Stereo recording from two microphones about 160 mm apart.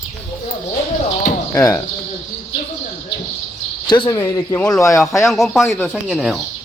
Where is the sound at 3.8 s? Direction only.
25° left (ahead or behind).